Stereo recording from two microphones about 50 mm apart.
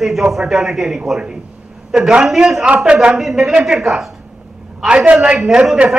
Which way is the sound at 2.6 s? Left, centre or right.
Right.